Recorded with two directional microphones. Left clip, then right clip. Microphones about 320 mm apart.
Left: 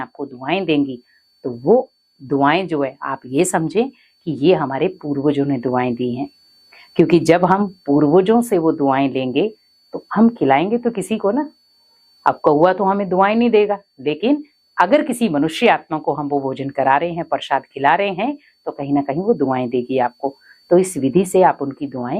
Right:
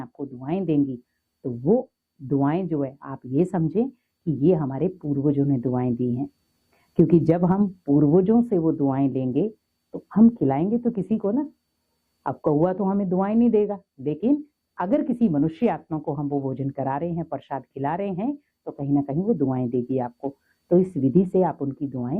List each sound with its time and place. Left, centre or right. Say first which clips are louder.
0.0 s speech: left 8 dB; centre
0.8 s speech: left 4 dB; left
1.4 s speech: left 8 dB; centre
20.2 s a sound: left 8 dB; centre
20.7 s speech: left 6 dB; centre